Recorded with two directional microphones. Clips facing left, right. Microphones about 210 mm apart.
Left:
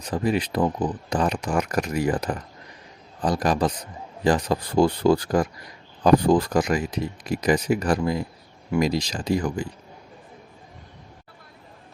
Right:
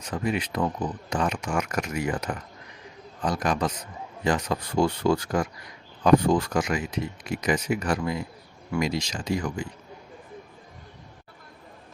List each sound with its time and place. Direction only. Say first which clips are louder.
0.0 s speech: left 4 dB; 35° left (ahead or behind)